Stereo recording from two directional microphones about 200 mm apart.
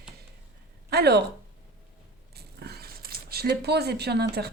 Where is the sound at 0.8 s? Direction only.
55° right (ahead or behind).